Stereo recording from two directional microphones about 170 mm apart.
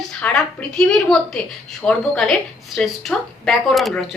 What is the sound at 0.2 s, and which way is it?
A woman's voice, 5° left (ahead or behind).